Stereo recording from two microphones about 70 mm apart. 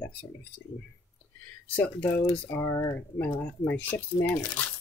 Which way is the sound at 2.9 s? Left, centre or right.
Left.